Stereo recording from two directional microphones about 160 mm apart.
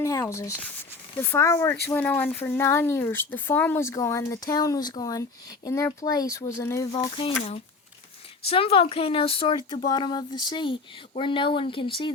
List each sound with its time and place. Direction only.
0.0 s speech: 20° left (ahead or behind)
7.2 s speech: 40° left (ahead or behind)